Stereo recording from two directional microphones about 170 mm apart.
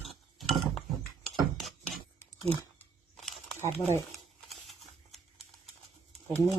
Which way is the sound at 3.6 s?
40° right (ahead or behind).